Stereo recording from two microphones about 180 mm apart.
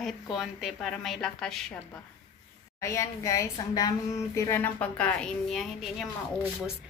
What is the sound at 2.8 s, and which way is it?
A woman's voice, 15° left (ahead or behind).